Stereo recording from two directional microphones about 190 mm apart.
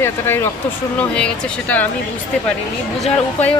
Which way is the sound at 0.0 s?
10° left (ahead or behind).